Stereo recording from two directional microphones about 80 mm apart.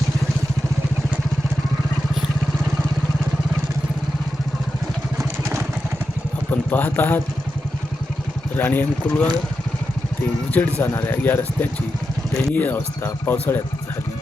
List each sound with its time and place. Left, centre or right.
6.5 s speech: left
8.5 s speech: left
10.5 s speech: left